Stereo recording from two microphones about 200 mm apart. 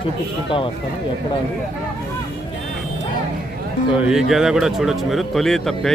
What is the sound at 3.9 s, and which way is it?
Speech, 5° right (ahead or behind).